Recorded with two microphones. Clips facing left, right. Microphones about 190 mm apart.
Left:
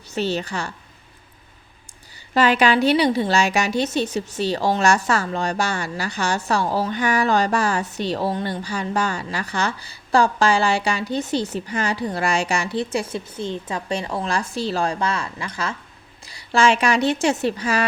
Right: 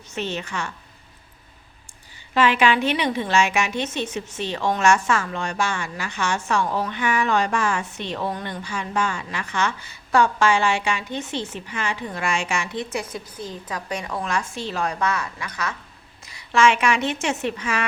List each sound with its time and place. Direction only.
0.1 s a woman's voice: 35° left (ahead or behind)
2.3 s a woman's voice: 40° left (ahead or behind)